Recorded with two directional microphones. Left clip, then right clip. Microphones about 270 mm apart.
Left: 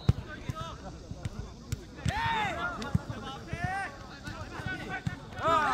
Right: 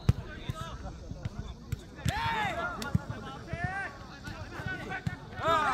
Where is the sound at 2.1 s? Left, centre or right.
Centre.